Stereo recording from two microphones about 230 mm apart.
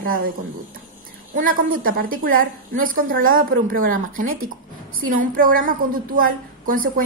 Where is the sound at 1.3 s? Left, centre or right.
Right.